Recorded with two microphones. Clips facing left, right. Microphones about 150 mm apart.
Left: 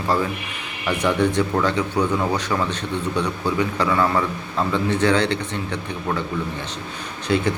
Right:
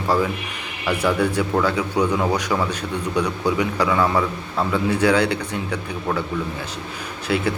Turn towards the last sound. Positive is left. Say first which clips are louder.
# left 2 dB
turn(degrees=-5)  # may be behind; listen again after turning